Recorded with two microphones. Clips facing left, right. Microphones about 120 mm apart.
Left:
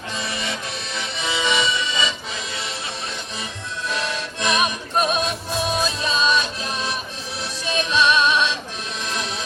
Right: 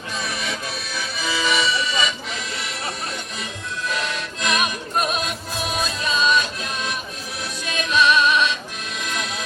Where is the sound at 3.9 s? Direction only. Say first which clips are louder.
Left 2 dB; 30° left (ahead or behind).